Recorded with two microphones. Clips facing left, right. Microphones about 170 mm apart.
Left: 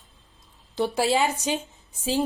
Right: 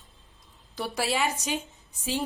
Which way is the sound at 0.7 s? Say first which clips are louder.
Left 6 dB; 25° left (ahead or behind).